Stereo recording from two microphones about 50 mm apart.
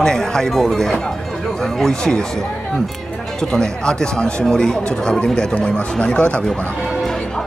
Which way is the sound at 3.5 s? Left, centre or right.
Centre.